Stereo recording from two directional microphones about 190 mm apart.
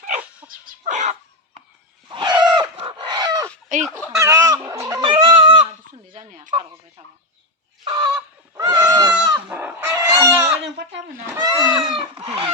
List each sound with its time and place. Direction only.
0.4 s dog: 40° right (ahead or behind)
2.0 s chicken: 25° right (ahead or behind)
3.7 s speech: 45° right (ahead or behind)
4.2 s a sound: 20° right (ahead or behind)
5.9 s a sound: 40° right (ahead or behind)
6.5 s speech: 25° right (ahead or behind)
7.9 s fowl: 20° right (ahead or behind)
9.5 s chicken: 10° right (ahead or behind)
10.3 s a sound: 10° right (ahead or behind)
10.6 s a sound: 70° right (ahead or behind)
11.4 s livestock: 20° right (ahead or behind)
11.9 s chicken: 30° right (ahead or behind)